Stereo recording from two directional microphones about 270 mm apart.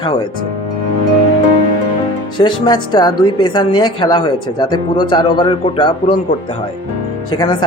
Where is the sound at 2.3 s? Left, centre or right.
Centre.